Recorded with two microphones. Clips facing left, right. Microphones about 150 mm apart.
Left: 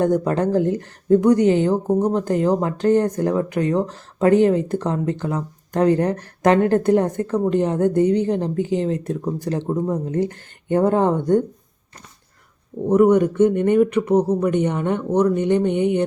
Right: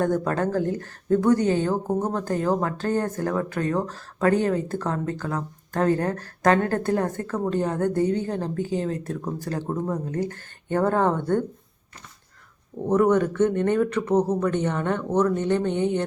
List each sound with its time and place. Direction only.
0.0 s speech: 20° left (ahead or behind)
12.9 s speech: 10° left (ahead or behind)